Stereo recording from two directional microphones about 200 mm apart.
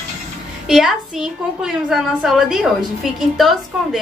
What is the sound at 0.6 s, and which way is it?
A woman's voice, centre (ahead or behind).